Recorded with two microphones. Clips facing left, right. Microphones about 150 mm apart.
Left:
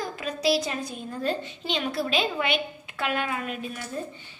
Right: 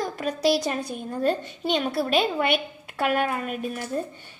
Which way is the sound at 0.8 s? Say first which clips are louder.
Right 5 dB; 50° right (ahead or behind).